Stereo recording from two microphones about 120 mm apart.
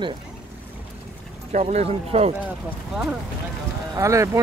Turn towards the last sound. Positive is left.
turn(degrees=-25)  # may be behind; listen again after turning